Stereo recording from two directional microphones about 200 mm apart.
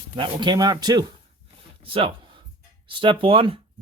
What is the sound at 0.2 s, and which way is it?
Speech, 25° right (ahead or behind).